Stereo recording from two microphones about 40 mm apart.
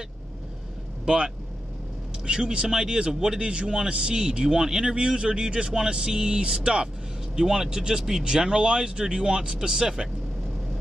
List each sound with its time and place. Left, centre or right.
1.0 s speech: right
3.3 s speech: right
7.3 s speech: centre